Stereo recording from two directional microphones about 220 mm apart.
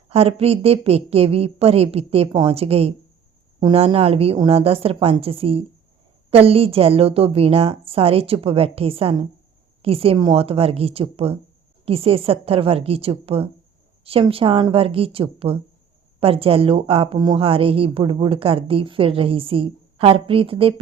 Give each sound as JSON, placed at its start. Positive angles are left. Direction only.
{"t": 0.1, "sound": "speech", "side_deg": -25}